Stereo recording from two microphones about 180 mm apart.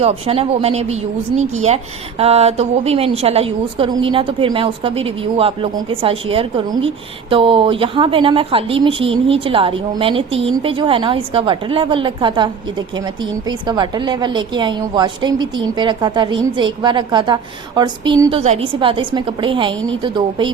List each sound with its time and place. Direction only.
0.0 s speech: 35° right (ahead or behind)
13.5 s speech: 25° right (ahead or behind)